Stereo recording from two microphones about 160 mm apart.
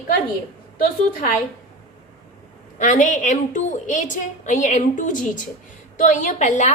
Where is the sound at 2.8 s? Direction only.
50° left (ahead or behind).